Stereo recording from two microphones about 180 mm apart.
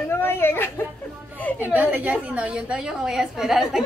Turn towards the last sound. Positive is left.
turn(degrees=0)  # may be behind; listen again after turning